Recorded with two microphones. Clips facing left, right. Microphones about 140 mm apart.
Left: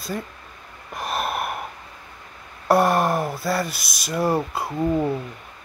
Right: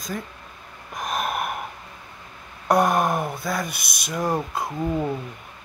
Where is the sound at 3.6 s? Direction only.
55° right (ahead or behind).